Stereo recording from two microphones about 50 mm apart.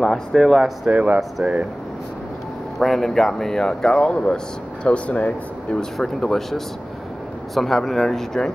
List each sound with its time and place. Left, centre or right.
0.0 s speech: centre
0.4 s speech: centre
0.8 s speech: right
2.8 s speech: centre; by 5.8 s left
5.9 s speech: centre